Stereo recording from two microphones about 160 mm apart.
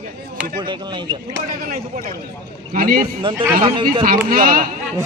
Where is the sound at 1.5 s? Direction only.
65° right (ahead or behind).